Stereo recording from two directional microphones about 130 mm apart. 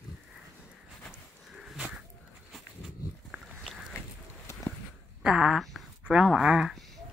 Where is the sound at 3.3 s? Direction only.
5° right (ahead or behind).